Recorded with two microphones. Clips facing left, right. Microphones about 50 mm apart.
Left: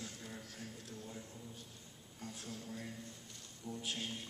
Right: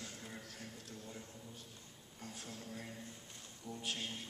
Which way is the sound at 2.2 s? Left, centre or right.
Centre.